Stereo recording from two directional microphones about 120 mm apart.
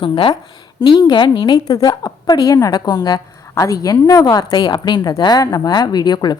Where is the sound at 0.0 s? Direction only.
45° left (ahead or behind).